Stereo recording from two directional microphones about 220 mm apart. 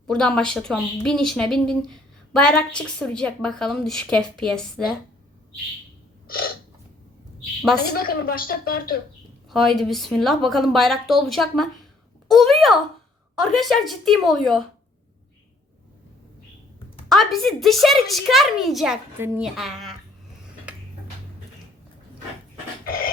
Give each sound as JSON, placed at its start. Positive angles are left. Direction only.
{"t": 0.1, "sound": "a woman's voice", "side_deg": 5}
{"t": 6.2, "sound": "a sound", "side_deg": 40}
{"t": 7.8, "sound": "a woman's voice", "side_deg": 45}
{"t": 9.5, "sound": "a woman's voice", "side_deg": 0}
{"t": 17.1, "sound": "a woman's voice", "side_deg": 0}